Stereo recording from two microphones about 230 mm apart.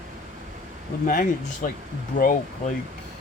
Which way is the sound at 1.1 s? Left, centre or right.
Left.